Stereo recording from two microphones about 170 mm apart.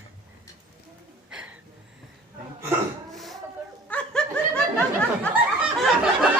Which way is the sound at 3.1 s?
Centre (ahead or behind).